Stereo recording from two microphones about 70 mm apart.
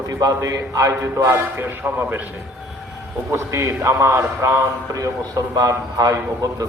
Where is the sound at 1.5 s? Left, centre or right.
Right.